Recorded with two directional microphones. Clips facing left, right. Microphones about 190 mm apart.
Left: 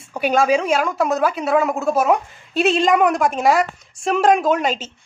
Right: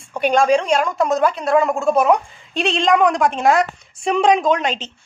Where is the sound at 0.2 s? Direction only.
5° left (ahead or behind).